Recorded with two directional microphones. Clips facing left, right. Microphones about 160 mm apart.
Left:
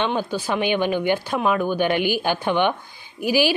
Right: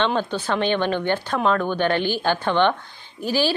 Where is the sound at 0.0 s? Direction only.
10° left (ahead or behind).